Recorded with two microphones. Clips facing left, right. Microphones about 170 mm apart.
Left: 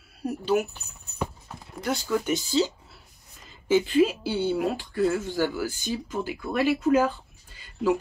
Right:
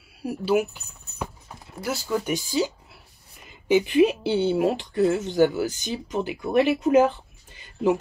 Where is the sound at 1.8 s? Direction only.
5° right (ahead or behind).